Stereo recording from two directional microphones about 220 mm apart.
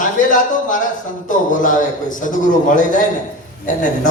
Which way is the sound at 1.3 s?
35° left (ahead or behind).